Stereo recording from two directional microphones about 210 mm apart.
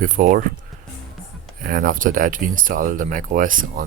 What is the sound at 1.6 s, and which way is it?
Speech, 40° right (ahead or behind).